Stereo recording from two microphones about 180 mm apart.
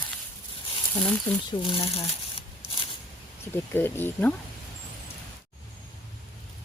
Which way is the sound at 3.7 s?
10° left (ahead or behind).